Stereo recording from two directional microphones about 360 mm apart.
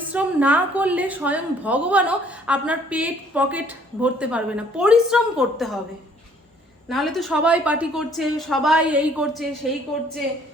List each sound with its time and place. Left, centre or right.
0.1 s a woman's voice: centre
6.8 s a woman's voice: centre